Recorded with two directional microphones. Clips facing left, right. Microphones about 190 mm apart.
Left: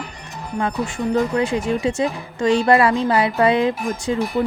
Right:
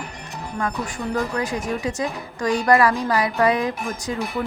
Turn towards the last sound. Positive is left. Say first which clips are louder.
# left 5 dB
turn(degrees=30)  # may be behind; listen again after turning